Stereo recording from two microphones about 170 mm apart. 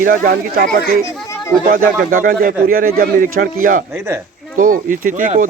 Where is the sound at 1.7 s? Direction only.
55° right (ahead or behind).